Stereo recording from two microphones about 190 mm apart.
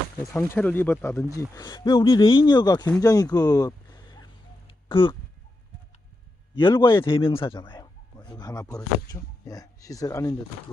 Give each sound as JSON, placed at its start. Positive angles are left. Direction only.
{"t": 0.3, "sound": "speech", "side_deg": 10}
{"t": 6.6, "sound": "a man's voice", "side_deg": 25}